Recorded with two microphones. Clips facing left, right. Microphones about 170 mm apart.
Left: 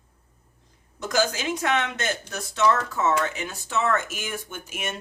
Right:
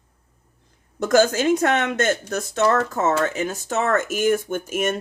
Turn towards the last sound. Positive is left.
turn(degrees=-45)  # may be behind; listen again after turning